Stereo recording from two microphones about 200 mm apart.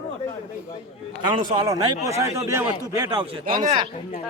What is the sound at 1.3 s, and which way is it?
A man's voice, 20° right (ahead or behind).